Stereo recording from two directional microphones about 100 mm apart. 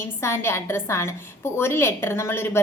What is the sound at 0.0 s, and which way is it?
A woman's voice, 25° left (ahead or behind).